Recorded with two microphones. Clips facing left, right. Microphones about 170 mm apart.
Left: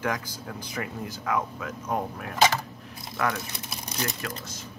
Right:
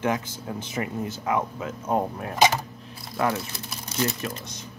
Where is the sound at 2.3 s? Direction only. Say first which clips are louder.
Right 2 dB; 15° right (ahead or behind).